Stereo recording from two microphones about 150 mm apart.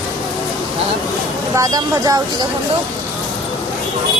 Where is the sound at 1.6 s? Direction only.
25° right (ahead or behind).